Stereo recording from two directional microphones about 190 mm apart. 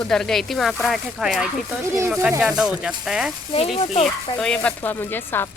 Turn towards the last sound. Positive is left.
turn(degrees=10)  # may be behind; listen again after turning